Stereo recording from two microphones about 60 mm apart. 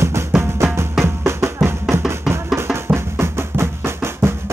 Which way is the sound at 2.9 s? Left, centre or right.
Right.